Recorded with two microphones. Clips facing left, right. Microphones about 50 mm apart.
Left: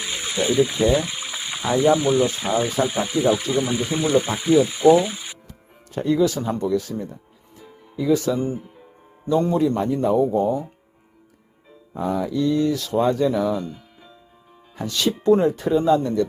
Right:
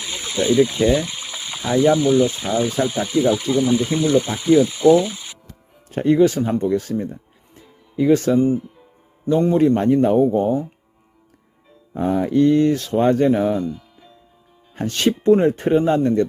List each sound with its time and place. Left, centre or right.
0.0 s speech: centre
5.9 s speech: right
7.0 s music: right
7.9 s speech: right
9.6 s speech: right
11.9 s speech: right
14.8 s speech: right